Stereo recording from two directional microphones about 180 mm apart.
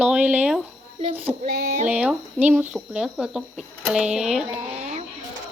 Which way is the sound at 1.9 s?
5° right (ahead or behind).